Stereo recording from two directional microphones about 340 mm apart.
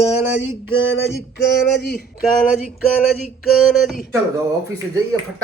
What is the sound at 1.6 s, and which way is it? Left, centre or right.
Speech, left.